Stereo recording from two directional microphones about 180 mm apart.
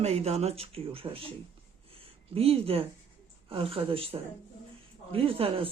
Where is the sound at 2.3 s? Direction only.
35° right (ahead or behind).